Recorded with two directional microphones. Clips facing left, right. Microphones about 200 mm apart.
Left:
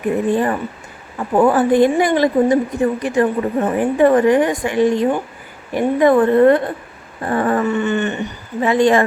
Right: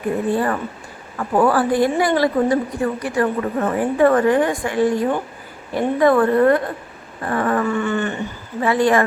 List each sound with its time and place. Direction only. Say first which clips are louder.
0.3 s a woman's voice: left 2 dB; 20° left (ahead or behind)